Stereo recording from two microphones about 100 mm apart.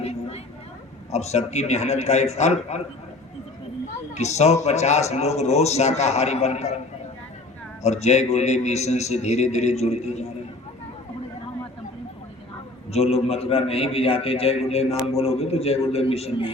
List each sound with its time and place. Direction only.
0.0 s a sound: 90° left
1.1 s a man's voice: 90° left
4.2 s a man's voice: 90° left
7.8 s a man's voice: 90° left
12.9 s a man's voice: 90° left